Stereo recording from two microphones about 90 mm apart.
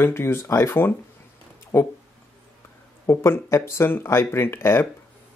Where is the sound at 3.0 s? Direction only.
30° left (ahead or behind).